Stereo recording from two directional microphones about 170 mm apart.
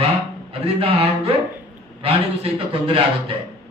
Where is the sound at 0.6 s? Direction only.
35° right (ahead or behind).